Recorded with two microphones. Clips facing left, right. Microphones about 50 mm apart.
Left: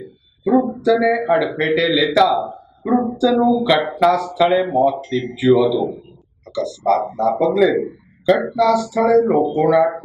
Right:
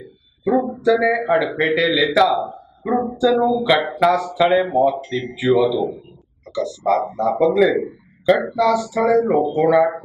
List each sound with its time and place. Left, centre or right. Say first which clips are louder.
0.0 s a sound: left 1 dB; centre
0.9 s a man's voice: left 2 dB; centre
5.1 s a man's voice: left 3 dB; centre
8.5 s a man's voice: left 2 dB; centre